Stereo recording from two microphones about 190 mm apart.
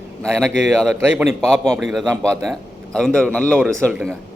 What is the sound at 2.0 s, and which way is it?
Speech, 15° right (ahead or behind).